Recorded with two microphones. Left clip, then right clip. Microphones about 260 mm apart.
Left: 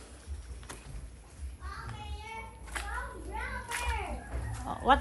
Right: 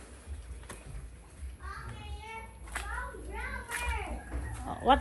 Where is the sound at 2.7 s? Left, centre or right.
Centre.